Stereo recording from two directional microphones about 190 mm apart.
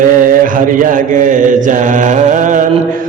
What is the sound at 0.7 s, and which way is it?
Mantra, 45° right (ahead or behind).